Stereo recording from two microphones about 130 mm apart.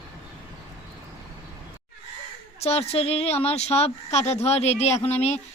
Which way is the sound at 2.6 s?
50° left (ahead or behind).